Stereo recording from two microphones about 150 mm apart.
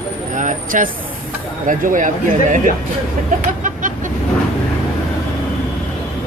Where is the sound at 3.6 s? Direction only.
60° right (ahead or behind).